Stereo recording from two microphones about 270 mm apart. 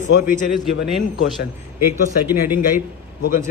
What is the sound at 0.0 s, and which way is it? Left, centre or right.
Speech, left.